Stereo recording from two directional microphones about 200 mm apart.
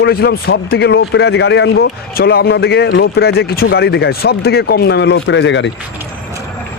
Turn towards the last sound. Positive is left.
turn(degrees=65)  # may be behind; listen again after turning